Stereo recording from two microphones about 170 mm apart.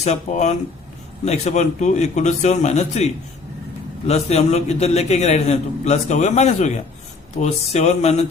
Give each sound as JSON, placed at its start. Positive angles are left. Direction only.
{"t": 0.0, "sound": "a man's voice", "side_deg": 40}